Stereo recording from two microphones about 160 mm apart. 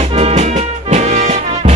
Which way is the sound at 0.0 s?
45° right (ahead or behind).